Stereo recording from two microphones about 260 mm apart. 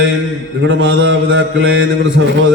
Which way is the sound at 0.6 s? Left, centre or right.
Right.